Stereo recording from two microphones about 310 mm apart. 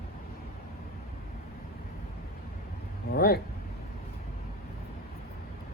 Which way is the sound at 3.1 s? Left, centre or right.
Left.